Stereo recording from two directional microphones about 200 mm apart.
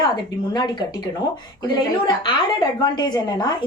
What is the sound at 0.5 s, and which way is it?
A woman's voice, 20° left (ahead or behind).